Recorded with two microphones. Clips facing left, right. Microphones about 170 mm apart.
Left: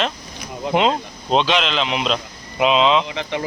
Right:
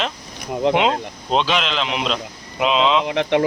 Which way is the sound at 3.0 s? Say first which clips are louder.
Right 7 dB; 65° right (ahead or behind).